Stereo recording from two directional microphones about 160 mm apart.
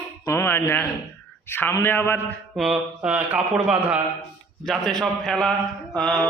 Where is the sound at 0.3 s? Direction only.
15° left (ahead or behind).